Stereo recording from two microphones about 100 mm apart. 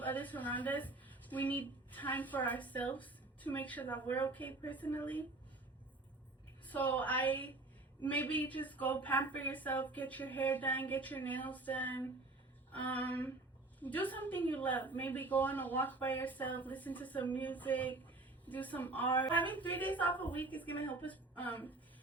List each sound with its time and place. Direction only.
0.0 s a woman's voice: 15° left (ahead or behind)
6.7 s a woman's voice: 15° left (ahead or behind)